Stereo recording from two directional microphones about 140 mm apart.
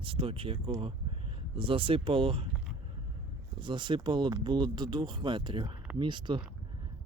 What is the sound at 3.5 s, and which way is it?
Speech, 35° right (ahead or behind).